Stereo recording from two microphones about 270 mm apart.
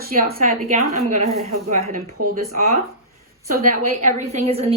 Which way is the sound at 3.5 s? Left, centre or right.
Right.